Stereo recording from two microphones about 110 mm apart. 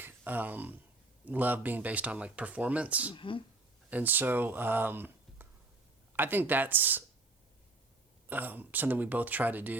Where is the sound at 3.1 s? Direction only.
50° left (ahead or behind).